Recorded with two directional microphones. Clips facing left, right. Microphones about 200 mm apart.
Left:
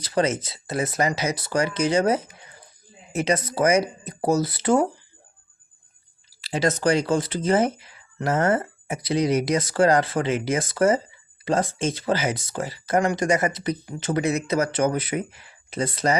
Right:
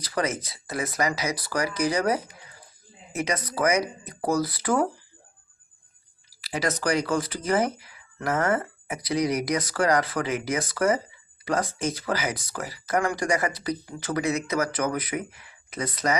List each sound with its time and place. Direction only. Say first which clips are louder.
0.0 s speech: left 5 dB; 25° left (ahead or behind)
6.4 s speech: left 5 dB; 25° left (ahead or behind)